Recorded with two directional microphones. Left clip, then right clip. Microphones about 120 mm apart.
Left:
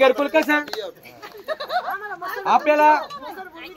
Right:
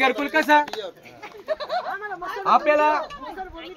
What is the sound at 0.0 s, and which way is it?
Speech, 45° right (ahead or behind).